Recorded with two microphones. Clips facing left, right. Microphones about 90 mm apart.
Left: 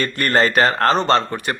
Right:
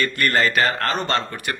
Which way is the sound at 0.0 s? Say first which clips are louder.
Left 2 dB; 35° left (ahead or behind).